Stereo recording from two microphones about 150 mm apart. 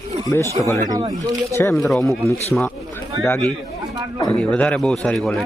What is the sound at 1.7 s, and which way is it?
Speech, centre (ahead or behind).